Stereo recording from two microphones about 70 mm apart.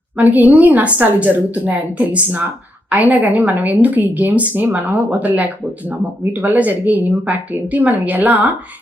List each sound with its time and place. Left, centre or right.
0.2 s a woman's voice: right